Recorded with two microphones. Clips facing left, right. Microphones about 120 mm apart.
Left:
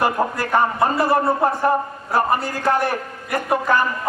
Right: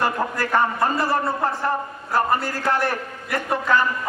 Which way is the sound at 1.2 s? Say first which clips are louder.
Left 5 dB; 20° left (ahead or behind).